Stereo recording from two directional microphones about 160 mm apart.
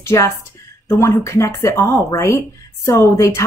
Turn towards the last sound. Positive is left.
turn(degrees=20)  # may be behind; listen again after turning